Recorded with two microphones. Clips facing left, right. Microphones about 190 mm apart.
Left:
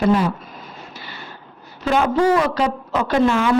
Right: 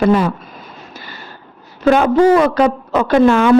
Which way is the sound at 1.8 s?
55° right (ahead or behind).